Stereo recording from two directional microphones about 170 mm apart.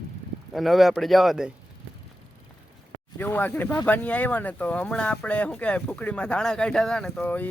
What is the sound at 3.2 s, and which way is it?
Speech, 10° left (ahead or behind).